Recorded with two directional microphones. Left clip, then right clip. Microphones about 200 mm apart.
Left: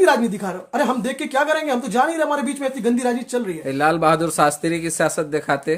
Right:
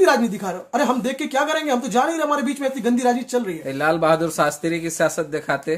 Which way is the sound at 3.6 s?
25° left (ahead or behind).